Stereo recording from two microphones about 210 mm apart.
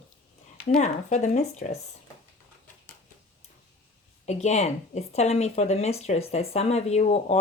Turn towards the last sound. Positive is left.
turn(degrees=30)  # may be behind; listen again after turning